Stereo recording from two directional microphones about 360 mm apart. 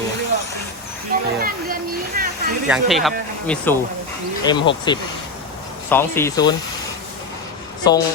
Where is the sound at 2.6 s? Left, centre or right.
Centre.